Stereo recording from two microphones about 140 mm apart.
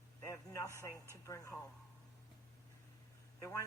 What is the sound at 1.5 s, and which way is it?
Speech, 5° left (ahead or behind).